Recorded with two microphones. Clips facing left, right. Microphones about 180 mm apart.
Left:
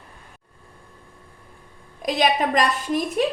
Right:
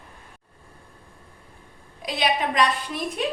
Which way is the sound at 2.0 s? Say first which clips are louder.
Left 4 dB; 45° left (ahead or behind).